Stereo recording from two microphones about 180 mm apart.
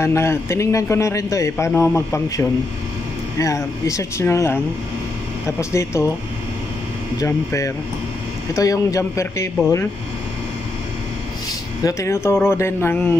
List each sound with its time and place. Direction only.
0.0 s a man's voice: 15° left (ahead or behind)
5.6 s a man's voice: 15° left (ahead or behind)
7.2 s a man's voice: 15° left (ahead or behind)
11.8 s a man's voice: 15° left (ahead or behind)